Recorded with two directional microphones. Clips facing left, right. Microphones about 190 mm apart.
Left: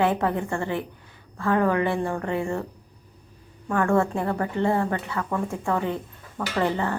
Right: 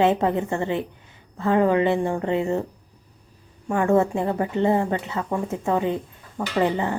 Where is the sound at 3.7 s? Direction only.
20° right (ahead or behind).